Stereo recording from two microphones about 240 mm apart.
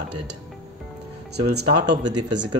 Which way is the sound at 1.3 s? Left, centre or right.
Right.